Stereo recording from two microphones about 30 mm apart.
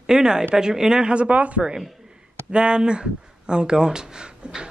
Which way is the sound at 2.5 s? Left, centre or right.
Right.